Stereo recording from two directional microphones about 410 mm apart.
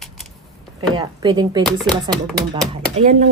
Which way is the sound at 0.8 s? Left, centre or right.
Centre.